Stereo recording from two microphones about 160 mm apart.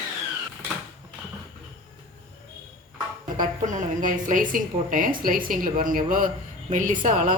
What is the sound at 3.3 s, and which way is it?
A woman's voice, 55° right (ahead or behind).